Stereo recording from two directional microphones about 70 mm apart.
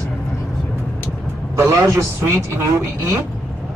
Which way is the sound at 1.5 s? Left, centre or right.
Right.